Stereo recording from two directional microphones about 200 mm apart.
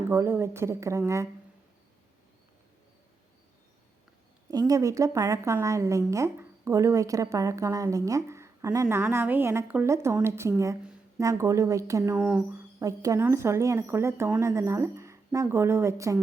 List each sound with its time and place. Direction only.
0.1 s a woman's voice: 10° right (ahead or behind)
4.5 s a woman's voice: 15° right (ahead or behind)
12.2 s a woman's voice: 5° right (ahead or behind)